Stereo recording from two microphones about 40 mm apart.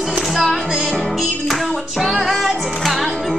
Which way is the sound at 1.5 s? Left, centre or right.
Centre.